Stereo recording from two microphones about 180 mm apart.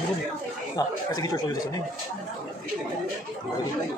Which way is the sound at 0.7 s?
20° left (ahead or behind).